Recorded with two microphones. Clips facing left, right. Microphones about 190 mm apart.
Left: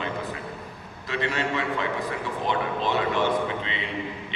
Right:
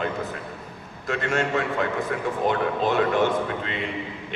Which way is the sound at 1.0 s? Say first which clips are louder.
Right 3 dB; 50° right (ahead or behind).